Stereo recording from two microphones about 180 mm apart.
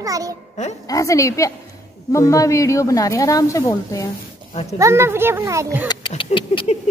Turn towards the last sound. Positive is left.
turn(degrees=35)  # may be behind; listen again after turning